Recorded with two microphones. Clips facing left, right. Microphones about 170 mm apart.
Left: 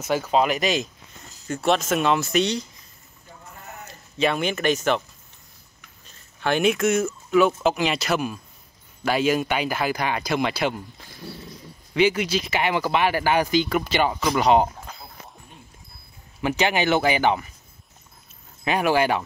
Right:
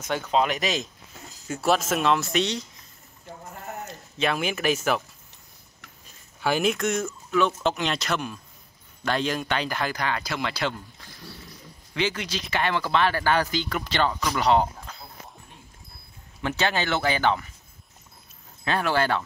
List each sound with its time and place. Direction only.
0.0 s speech: 5° left (ahead or behind)
3.8 s speech: centre (ahead or behind)
6.4 s speech: centre (ahead or behind)
11.9 s speech: 10° left (ahead or behind)
16.3 s speech: 15° left (ahead or behind)
18.6 s speech: 15° left (ahead or behind)